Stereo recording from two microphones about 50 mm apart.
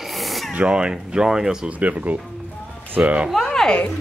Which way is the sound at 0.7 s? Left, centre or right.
Centre.